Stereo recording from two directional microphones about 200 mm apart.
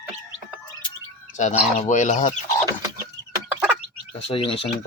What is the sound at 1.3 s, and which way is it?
Speech, 35° left (ahead or behind).